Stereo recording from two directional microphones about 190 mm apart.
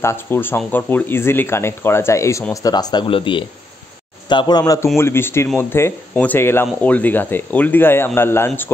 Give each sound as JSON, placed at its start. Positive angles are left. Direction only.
{"t": 0.0, "sound": "speech", "side_deg": 10}